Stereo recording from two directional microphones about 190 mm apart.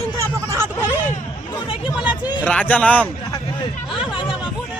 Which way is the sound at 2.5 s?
10° left (ahead or behind).